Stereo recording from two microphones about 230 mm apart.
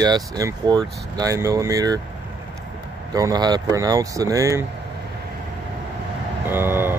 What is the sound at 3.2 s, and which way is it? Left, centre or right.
Speech, centre.